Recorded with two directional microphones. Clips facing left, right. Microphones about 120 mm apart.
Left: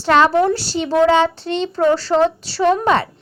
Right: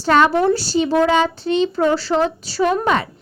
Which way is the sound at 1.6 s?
5° right (ahead or behind).